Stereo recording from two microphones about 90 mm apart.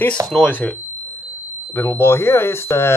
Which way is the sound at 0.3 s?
10° left (ahead or behind).